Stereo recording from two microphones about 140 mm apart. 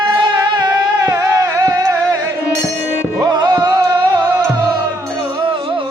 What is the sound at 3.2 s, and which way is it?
Music, 30° right (ahead or behind).